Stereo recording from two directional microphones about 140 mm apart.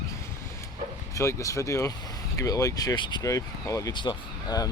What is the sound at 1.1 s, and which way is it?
Speech, 20° left (ahead or behind).